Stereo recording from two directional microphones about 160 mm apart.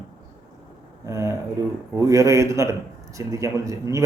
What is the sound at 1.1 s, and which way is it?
Speech, 20° right (ahead or behind).